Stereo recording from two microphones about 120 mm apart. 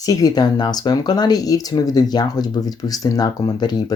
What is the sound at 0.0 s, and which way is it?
Speech, 30° left (ahead or behind).